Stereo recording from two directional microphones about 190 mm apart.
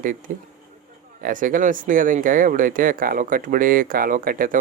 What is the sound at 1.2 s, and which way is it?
Speech, 45° right (ahead or behind).